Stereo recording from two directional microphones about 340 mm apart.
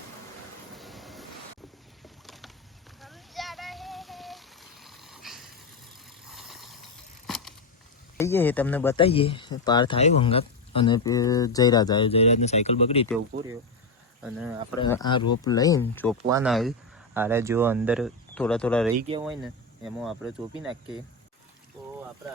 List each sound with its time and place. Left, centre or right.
0.8 s vehicle: centre
2.2 s boat: centre
3.0 s a sound: centre
8.2 s speech: centre
14.2 s speech: centre
14.8 s speech: centre
18.9 s speech: centre
19.2 s speech: centre